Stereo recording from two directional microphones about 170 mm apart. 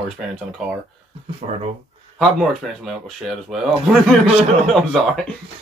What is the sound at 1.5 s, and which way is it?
Speech, 40° right (ahead or behind).